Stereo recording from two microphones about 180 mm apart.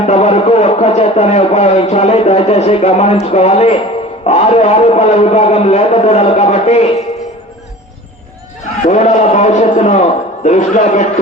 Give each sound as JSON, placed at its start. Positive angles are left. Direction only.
{"t": 0.0, "sound": "a man's voice", "side_deg": 35}
{"t": 8.9, "sound": "a man's voice", "side_deg": 40}